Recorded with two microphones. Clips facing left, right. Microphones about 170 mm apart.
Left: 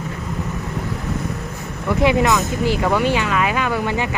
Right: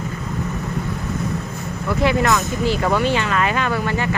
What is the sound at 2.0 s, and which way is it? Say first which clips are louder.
Speech: left 2 dB; 20° left (ahead or behind).